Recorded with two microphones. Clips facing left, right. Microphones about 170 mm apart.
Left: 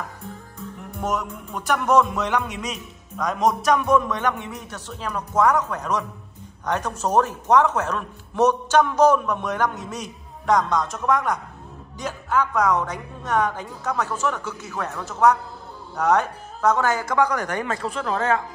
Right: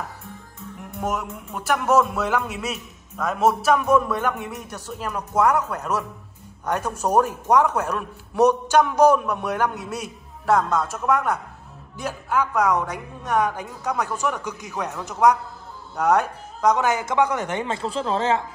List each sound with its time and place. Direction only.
1.0 s a man's voice: 10° right (ahead or behind); by 18.4 s 25° right (ahead or behind)